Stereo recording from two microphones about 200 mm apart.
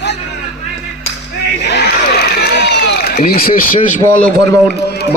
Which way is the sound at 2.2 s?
55° left (ahead or behind).